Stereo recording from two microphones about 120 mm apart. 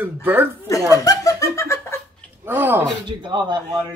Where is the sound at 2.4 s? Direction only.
15° right (ahead or behind).